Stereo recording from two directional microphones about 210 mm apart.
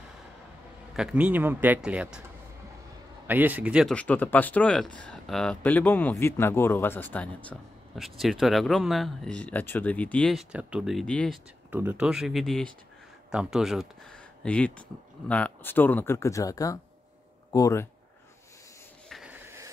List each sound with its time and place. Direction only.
0.9 s speech: 5° right (ahead or behind)
3.3 s speech: 10° right (ahead or behind)
3.9 s speech: 5° left (ahead or behind)
11.7 s speech: 10° right (ahead or behind); by 17.8 s 15° left (ahead or behind)
19.0 s a sound: 5° right (ahead or behind)